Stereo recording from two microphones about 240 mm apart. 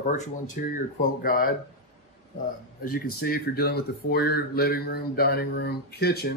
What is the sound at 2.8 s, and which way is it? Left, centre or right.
Speech, left.